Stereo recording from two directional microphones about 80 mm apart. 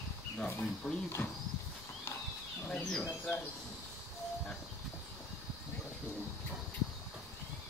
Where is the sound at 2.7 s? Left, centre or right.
Centre.